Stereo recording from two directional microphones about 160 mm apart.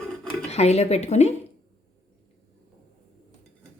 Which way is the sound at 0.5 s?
40° left (ahead or behind).